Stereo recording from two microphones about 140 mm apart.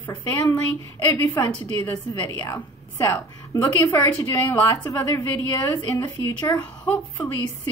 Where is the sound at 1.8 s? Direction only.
25° left (ahead or behind).